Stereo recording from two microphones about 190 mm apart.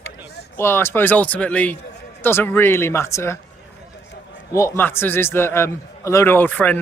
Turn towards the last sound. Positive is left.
turn(degrees=10)  # may be behind; listen again after turning